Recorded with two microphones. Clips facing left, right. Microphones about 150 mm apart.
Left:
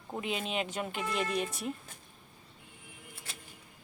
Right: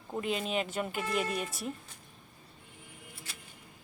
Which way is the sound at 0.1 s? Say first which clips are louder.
Right 2 dB; 5° left (ahead or behind).